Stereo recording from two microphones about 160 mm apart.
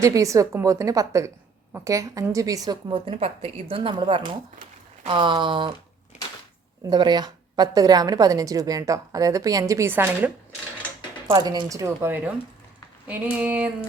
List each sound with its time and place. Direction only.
0.0 s a woman's voice: 20° right (ahead or behind)
2.9 s a woman's voice: 35° right (ahead or behind)
6.8 s a woman's voice: 25° right (ahead or behind)
11.3 s a woman's voice: 25° right (ahead or behind)
13.1 s a sound: 10° right (ahead or behind)